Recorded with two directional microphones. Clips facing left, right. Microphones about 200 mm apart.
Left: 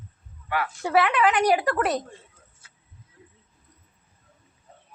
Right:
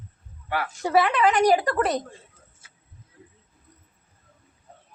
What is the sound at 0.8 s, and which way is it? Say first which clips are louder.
A woman's voice: right 1 dB; centre (ahead or behind).